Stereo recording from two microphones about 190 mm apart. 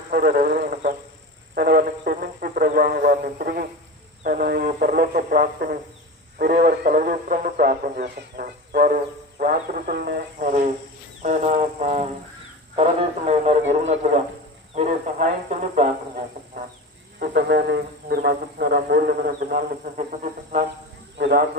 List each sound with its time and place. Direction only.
0.1 s speech: 55° right (ahead or behind)
11.2 s speech: 40° right (ahead or behind)
17.2 s speech: 55° right (ahead or behind)
21.2 s speech: 65° right (ahead or behind)